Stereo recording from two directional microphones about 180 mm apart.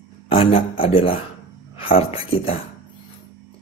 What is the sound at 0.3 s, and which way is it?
Speech, 30° left (ahead or behind).